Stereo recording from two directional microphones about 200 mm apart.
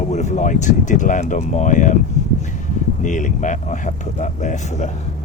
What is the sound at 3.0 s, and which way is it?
Speech, 40° left (ahead or behind).